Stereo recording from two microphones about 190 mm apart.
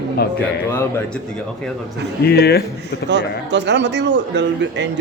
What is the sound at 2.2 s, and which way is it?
Speech, 55° left (ahead or behind).